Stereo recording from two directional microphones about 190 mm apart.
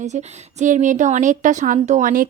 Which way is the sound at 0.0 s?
35° right (ahead or behind).